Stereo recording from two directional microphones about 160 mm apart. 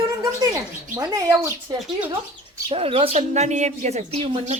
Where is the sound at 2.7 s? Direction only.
35° right (ahead or behind).